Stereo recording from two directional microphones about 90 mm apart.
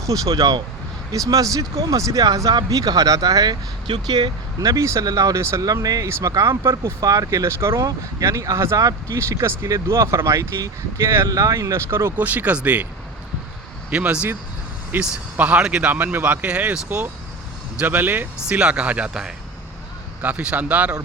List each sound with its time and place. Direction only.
0.0 s speech: 40° right (ahead or behind)
4.6 s speech: 35° right (ahead or behind)
11.3 s speech: 40° right (ahead or behind)
12.1 s speech: 20° right (ahead or behind)
13.9 s speech: 15° right (ahead or behind)